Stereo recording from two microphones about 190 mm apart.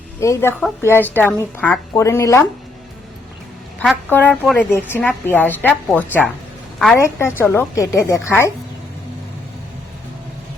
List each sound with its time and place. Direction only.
0.2 s a woman's voice: 15° left (ahead or behind)
3.8 s a woman's voice: 10° left (ahead or behind)